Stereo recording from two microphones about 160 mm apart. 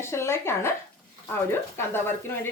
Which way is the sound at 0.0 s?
15° left (ahead or behind).